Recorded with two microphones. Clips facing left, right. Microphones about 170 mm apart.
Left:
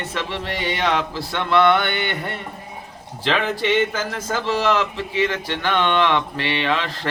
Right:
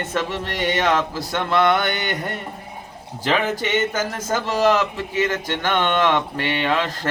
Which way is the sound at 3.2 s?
45° right (ahead or behind).